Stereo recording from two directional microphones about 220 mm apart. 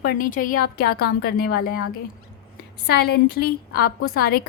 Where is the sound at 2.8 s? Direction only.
45° left (ahead or behind).